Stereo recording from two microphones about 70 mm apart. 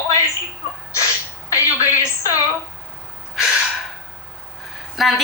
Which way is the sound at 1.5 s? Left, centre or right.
Left.